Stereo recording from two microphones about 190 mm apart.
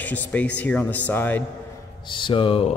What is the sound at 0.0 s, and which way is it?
A man's voice, 10° left (ahead or behind).